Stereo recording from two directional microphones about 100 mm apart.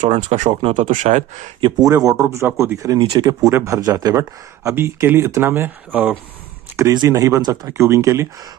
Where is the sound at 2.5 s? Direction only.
20° right (ahead or behind).